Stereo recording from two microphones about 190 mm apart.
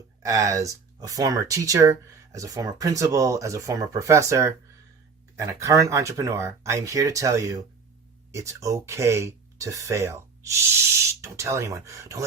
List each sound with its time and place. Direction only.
0.2 s speech: 15° right (ahead or behind)